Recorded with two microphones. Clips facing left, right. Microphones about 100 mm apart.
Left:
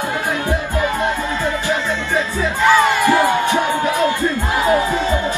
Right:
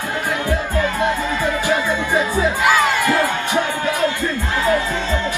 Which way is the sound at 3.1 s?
15° left (ahead or behind).